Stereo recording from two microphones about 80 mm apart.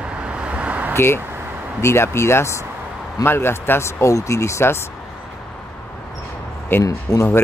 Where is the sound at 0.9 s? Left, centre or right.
Left.